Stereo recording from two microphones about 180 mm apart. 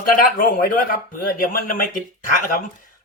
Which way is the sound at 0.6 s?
55° left (ahead or behind).